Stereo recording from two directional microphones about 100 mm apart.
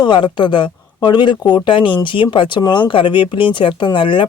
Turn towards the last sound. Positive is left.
turn(degrees=55)  # may be behind; listen again after turning